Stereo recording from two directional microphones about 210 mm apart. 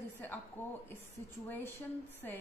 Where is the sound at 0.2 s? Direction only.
10° left (ahead or behind).